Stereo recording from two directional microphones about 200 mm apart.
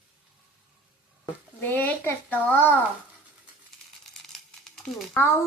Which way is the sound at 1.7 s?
10° left (ahead or behind).